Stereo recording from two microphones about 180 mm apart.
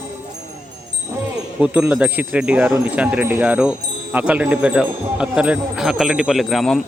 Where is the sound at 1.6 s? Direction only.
10° right (ahead or behind).